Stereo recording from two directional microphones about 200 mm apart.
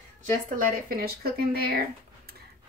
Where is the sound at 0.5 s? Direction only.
45° right (ahead or behind).